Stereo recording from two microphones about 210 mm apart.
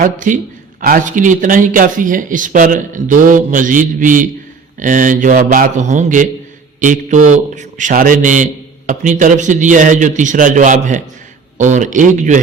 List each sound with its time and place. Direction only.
0.0 s speech: 35° right (ahead or behind)